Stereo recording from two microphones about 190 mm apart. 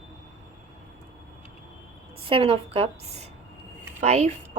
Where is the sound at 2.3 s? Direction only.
30° right (ahead or behind).